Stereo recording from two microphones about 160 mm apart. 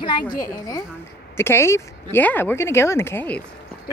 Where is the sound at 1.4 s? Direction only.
15° left (ahead or behind).